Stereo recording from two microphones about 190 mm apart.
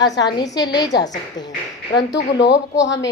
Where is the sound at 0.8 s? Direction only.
65° left (ahead or behind).